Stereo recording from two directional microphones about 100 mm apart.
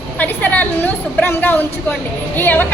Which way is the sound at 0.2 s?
15° left (ahead or behind).